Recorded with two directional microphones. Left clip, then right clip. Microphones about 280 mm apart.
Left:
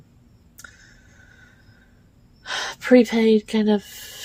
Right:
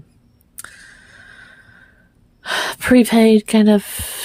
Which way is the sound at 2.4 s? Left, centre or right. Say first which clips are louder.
Right 7 dB; right.